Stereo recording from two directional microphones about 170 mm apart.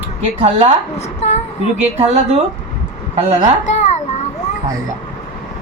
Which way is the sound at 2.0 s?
40° right (ahead or behind).